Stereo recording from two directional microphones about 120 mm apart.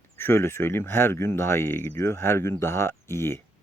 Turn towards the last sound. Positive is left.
turn(degrees=20)  # may be behind; listen again after turning